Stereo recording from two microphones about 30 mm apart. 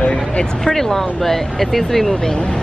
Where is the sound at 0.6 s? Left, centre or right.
Centre.